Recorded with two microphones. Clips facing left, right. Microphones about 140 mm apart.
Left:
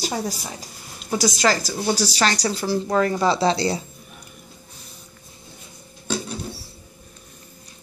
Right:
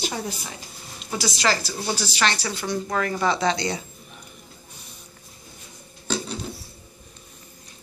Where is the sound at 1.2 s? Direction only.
45° left (ahead or behind).